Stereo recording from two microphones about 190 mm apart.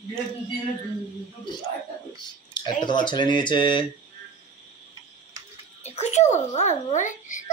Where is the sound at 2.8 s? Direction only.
25° left (ahead or behind).